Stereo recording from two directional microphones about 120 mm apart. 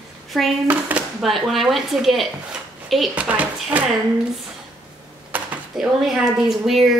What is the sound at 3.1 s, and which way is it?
Speech, 10° right (ahead or behind).